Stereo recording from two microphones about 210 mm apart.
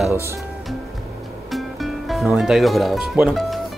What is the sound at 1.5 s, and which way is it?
Speech, centre (ahead or behind).